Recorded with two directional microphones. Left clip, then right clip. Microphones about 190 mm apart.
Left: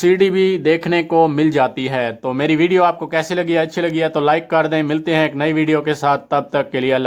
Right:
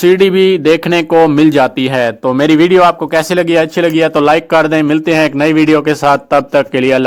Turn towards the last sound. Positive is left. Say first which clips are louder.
# right 7 dB
turn(degrees=-25)  # may be behind; listen again after turning